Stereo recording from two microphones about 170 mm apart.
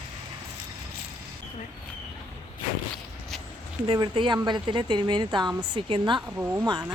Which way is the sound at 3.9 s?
30° right (ahead or behind).